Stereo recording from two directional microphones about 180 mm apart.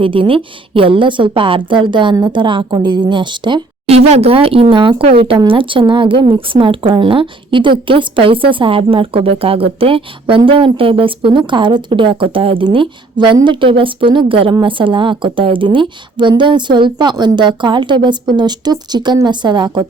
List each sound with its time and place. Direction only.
0.0 s speech: 30° right (ahead or behind)